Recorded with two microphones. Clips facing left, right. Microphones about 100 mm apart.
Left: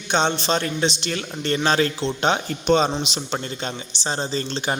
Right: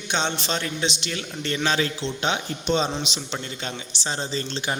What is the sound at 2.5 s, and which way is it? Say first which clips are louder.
A man's voice: left 5 dB; 50° left (ahead or behind).